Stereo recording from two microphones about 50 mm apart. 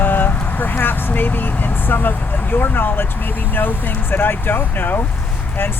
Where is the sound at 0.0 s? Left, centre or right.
Left.